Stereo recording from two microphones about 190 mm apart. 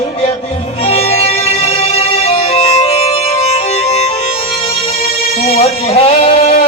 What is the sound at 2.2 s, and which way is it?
Music, 30° left (ahead or behind).